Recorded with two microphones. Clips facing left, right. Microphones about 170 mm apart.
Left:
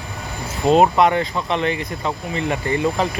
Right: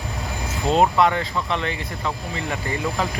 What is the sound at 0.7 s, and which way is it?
Speech, 20° left (ahead or behind).